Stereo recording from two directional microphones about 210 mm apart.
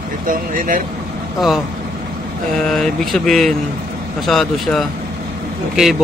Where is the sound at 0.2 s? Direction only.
40° right (ahead or behind).